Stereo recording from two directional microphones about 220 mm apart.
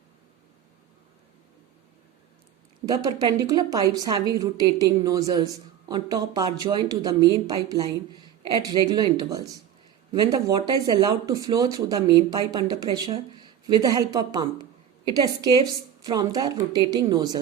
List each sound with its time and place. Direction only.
2.8 s a woman's voice: 15° right (ahead or behind)